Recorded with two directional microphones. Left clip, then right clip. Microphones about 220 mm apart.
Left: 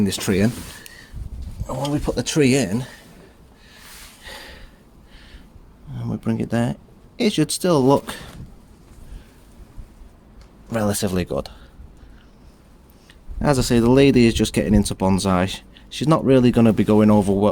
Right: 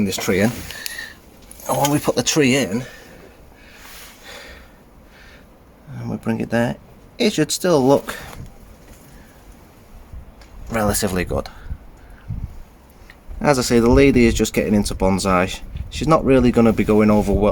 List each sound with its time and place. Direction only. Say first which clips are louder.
0.0 s speech: right 2 dB; 35° left (ahead or behind)
1.9 s speech: right 5 dB; 10° right (ahead or behind)
2.1 s speech: right 4 dB; 5° left (ahead or behind)
2.4 s speech: left 2 dB; 30° left (ahead or behind)
4.3 s gasp: left 1 dB; 25° left (ahead or behind)
6.0 s speech: right 1 dB; 10° left (ahead or behind)
10.7 s speech: right 2 dB; 10° left (ahead or behind)
13.4 s speech: right 3 dB; 15° left (ahead or behind)